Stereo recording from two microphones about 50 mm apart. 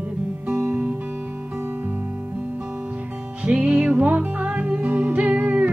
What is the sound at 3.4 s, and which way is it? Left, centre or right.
Music, right.